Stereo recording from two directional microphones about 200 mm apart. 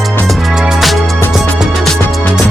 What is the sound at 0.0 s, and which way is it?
Music, centre (ahead or behind).